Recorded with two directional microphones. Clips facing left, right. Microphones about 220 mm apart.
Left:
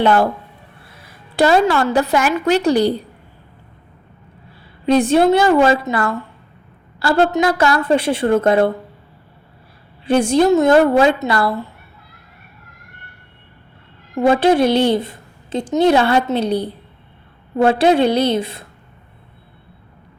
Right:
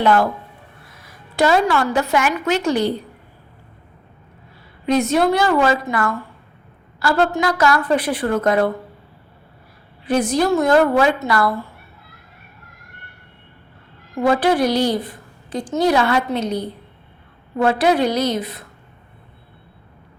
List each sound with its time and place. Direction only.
0.0 s a woman's voice: 30° left (ahead or behind)
4.9 s a woman's voice: 30° left (ahead or behind)
10.1 s a woman's voice: 30° left (ahead or behind)
14.2 s a woman's voice: 25° left (ahead or behind)